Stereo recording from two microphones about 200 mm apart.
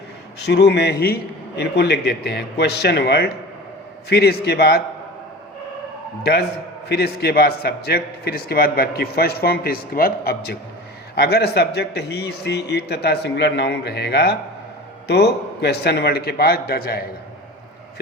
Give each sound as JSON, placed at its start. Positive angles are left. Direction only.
{"t": 0.4, "sound": "a man's voice", "side_deg": 55}
{"t": 6.8, "sound": "a man's voice", "side_deg": 55}